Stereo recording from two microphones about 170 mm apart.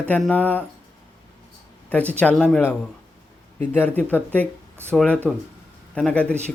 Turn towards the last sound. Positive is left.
turn(degrees=5)  # may be behind; listen again after turning